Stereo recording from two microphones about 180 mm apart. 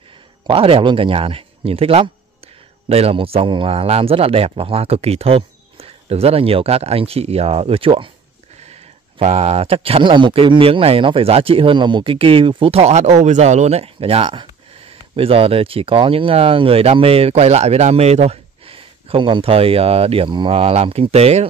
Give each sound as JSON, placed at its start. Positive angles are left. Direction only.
{"t": 0.5, "sound": "speech", "side_deg": -30}
{"t": 9.2, "sound": "speech", "side_deg": -35}